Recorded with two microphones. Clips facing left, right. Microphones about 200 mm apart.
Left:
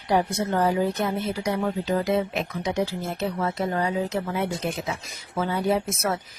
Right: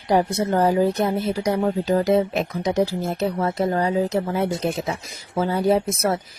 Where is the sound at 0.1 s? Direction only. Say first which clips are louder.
Right 4 dB; 40° right (ahead or behind).